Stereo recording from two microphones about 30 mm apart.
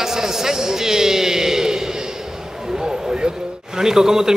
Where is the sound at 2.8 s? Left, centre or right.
Right.